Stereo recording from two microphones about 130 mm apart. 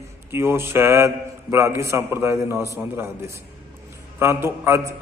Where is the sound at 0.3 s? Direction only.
20° right (ahead or behind).